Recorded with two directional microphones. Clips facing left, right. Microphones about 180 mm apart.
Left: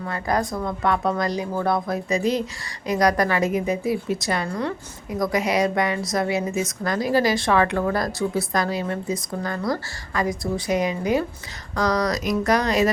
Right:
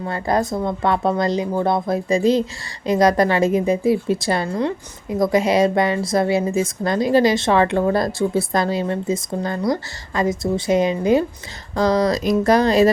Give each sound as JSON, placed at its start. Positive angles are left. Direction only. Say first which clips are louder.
{"t": 0.0, "sound": "a woman's voice", "louder": "right 4 dB", "side_deg": -25}